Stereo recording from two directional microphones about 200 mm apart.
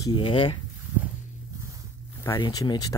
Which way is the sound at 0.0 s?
25° left (ahead or behind).